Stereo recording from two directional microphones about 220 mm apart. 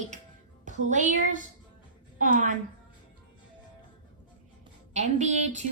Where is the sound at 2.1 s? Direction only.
35° right (ahead or behind).